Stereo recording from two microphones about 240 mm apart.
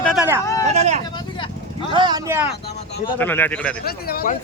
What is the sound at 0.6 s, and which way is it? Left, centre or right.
Speech, right.